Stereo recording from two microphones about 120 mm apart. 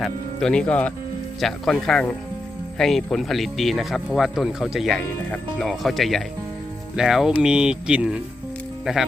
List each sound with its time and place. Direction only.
0.0 s speech: 5° left (ahead or behind)